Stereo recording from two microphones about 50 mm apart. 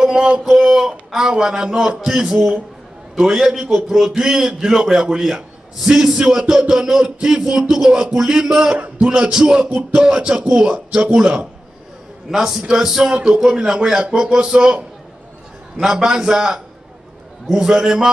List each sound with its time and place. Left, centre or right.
0.0 s a sound: centre
0.5 s a man's voice: centre
8.7 s a sound: right
9.0 s music: centre
9.3 s a man's voice: centre
15.8 s a man's voice: centre